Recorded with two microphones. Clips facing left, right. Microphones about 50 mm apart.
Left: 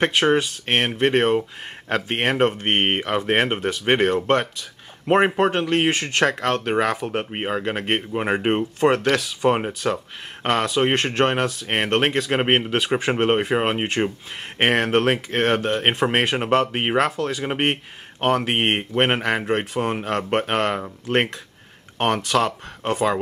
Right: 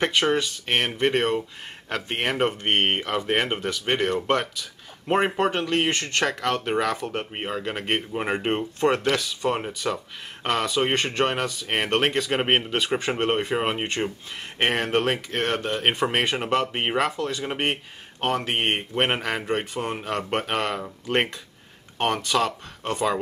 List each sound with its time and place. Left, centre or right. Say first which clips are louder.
0.0 s speech: left 4 dB; centre
1.9 s speech: left 5 dB; left
2.4 s speech: left 1 dB; centre
3.8 s speech: left 6 dB; left
4.1 s speech: left 4 dB; centre
8.9 s speech: left 3 dB; centre
9.4 s speech: left 5 dB; left
16.7 s speech: left 3 dB; left
18.8 s speech: left 4 dB; centre